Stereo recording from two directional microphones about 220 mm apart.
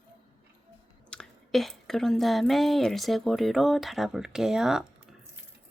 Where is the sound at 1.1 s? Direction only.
Centre (ahead or behind).